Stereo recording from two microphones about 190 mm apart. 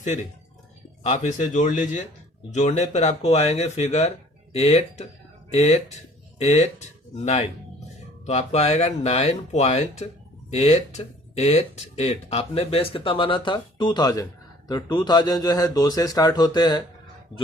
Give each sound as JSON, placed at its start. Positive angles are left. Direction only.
{"t": 1.1, "sound": "speech", "side_deg": 40}
{"t": 8.2, "sound": "a man's voice", "side_deg": 35}